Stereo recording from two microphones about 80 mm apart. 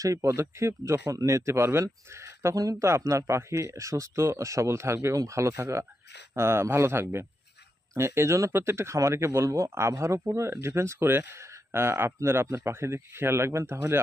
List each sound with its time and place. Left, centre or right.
0.0 s speech: right